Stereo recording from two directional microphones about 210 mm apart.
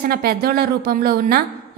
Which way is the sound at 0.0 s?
45° right (ahead or behind).